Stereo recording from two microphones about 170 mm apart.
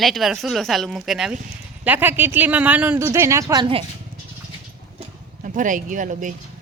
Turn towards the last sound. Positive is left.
turn(degrees=-50)  # may be behind; listen again after turning